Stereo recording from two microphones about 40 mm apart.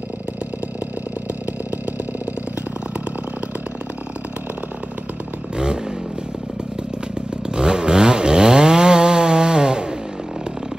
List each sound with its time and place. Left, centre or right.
7.4 s chainsaw: right